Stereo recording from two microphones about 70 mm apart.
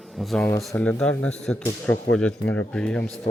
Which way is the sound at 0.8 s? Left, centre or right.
Centre.